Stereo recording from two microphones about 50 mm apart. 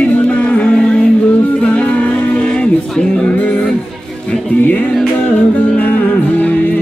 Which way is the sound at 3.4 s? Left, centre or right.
Left.